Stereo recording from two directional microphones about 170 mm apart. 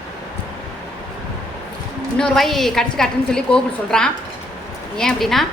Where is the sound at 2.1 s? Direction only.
5° left (ahead or behind).